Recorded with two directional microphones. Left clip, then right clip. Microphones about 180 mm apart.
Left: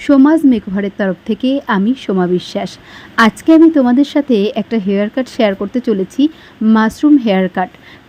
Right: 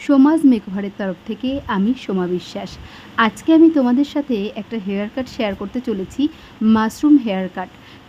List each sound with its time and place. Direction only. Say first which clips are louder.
0.3 s speech: left 4 dB; 20° left (ahead or behind)